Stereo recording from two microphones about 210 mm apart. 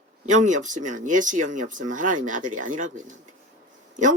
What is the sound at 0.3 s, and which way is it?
Speech, 35° right (ahead or behind).